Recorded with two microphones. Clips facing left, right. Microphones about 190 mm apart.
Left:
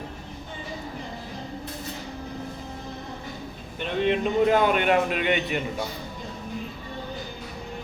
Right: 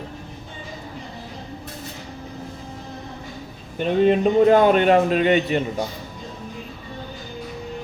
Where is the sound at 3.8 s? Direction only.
40° right (ahead or behind).